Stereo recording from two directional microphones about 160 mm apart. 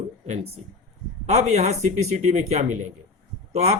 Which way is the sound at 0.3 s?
40° right (ahead or behind).